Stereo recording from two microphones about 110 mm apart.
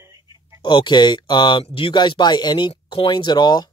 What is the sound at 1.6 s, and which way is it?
Speech, 50° left (ahead or behind).